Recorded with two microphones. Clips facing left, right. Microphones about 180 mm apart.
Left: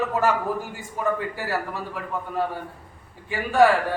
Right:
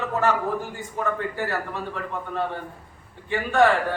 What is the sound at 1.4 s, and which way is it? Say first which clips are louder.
Speech: even; 10° left (ahead or behind).